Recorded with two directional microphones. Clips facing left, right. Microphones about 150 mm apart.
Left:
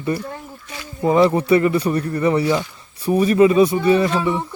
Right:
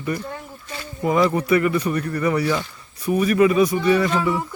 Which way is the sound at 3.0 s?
30° left (ahead or behind).